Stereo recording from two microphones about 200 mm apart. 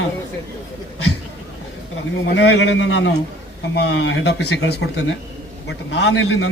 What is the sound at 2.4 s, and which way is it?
A man's voice, 60° left (ahead or behind).